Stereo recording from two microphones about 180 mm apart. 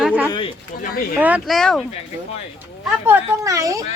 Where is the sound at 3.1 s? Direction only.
15° right (ahead or behind).